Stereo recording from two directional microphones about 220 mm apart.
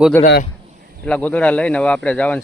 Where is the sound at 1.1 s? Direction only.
5° left (ahead or behind).